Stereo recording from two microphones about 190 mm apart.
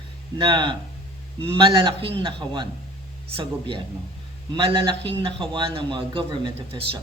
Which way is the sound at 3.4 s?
25° right (ahead or behind).